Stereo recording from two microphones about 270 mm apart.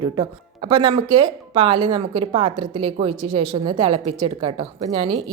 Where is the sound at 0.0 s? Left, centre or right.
Centre.